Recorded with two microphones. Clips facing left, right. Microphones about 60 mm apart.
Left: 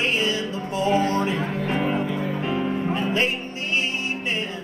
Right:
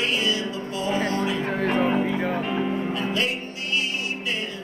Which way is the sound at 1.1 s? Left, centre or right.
Left.